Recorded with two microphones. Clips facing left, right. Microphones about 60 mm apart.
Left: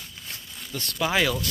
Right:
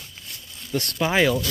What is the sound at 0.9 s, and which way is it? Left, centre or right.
Speech, centre.